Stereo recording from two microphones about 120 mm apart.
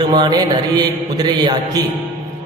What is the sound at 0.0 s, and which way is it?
A man's voice, 35° right (ahead or behind).